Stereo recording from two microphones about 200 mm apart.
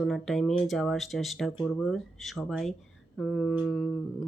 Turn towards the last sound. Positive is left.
turn(degrees=5)  # may be behind; listen again after turning